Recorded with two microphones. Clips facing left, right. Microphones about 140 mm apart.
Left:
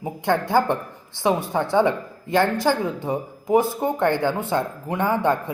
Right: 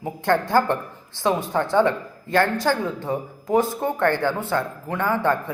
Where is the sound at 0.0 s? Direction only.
15° left (ahead or behind).